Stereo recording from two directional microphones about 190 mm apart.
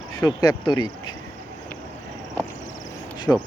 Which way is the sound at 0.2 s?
20° left (ahead or behind).